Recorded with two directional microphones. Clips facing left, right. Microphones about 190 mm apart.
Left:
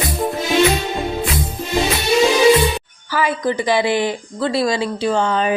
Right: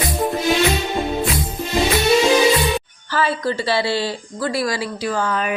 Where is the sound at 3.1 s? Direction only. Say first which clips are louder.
Left 2 dB; 15° left (ahead or behind).